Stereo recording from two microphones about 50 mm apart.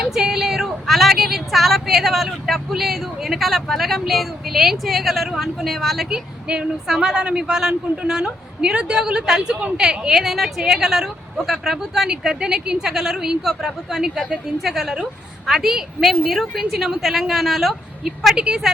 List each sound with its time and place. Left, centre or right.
0.0 s speech: centre
6.1 s speech: centre
18.3 s speech: centre